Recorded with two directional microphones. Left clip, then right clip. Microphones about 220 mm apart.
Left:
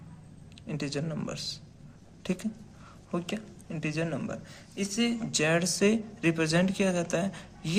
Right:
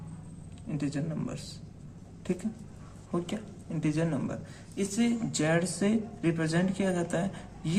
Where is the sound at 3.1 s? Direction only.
25° left (ahead or behind).